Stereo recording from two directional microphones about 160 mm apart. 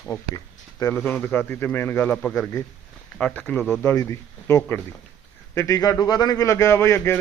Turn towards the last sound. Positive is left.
turn(degrees=15)  # may be behind; listen again after turning